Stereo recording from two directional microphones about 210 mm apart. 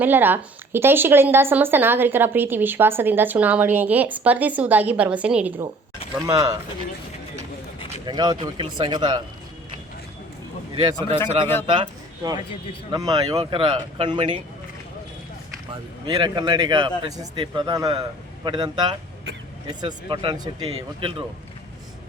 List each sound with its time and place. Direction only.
0.0 s speech: 10° right (ahead or behind)
8.0 s speech: 20° right (ahead or behind)
11.6 s speech: 25° right (ahead or behind)
15.7 s speech: 20° right (ahead or behind)